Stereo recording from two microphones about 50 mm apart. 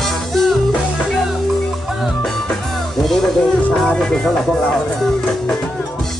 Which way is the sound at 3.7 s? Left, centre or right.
Centre.